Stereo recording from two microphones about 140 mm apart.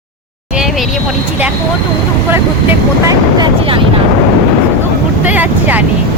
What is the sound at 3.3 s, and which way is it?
Vehicle, 35° right (ahead or behind).